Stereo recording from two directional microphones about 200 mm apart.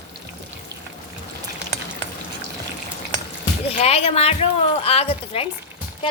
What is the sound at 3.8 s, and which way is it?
A woman's voice, 30° left (ahead or behind).